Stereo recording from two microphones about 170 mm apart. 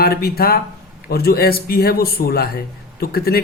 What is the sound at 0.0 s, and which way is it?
Speech, 65° left (ahead or behind).